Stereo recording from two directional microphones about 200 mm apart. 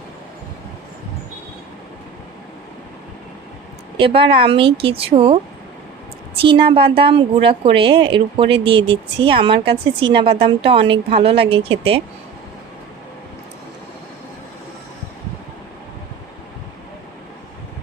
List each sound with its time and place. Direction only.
3.9 s speech: 25° right (ahead or behind)
6.4 s speech: 25° right (ahead or behind)